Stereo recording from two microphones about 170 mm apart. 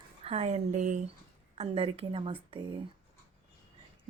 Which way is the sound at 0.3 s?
35° right (ahead or behind).